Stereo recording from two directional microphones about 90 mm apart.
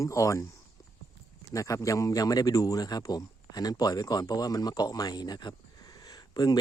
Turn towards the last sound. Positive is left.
turn(degrees=50)  # may be behind; listen again after turning